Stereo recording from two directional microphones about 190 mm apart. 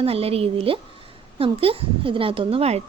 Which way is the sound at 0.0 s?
30° right (ahead or behind).